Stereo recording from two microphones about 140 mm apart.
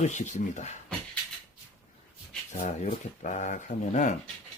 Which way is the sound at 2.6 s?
60° left (ahead or behind).